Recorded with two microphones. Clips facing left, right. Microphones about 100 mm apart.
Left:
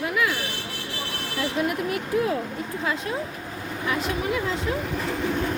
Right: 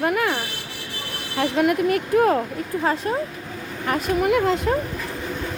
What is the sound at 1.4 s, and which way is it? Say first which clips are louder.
Speech: right 7 dB; 60° right (ahead or behind).